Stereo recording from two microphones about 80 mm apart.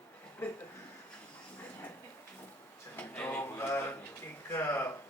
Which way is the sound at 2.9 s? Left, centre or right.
Left.